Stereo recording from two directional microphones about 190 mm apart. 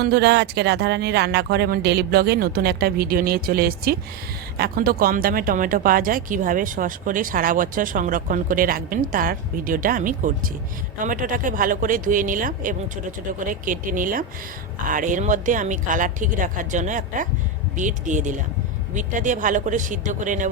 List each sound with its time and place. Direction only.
0.0 s speech: 60° right (ahead or behind); by 20.5 s 40° right (ahead or behind)